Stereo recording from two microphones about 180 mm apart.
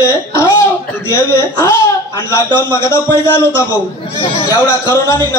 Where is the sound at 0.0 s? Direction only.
15° left (ahead or behind).